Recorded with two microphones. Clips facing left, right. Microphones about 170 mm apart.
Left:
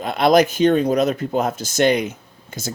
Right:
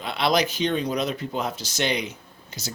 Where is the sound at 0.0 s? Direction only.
45° left (ahead or behind).